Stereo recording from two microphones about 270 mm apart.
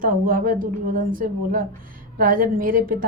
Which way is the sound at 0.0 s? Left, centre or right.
Right.